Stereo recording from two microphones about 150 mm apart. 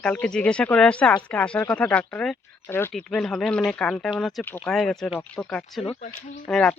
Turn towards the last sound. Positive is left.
turn(degrees=5)  # may be behind; listen again after turning